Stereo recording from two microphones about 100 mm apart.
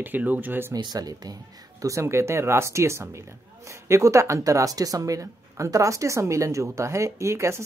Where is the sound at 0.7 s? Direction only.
45° right (ahead or behind).